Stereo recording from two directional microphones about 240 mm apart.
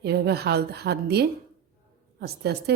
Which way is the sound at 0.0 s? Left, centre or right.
Right.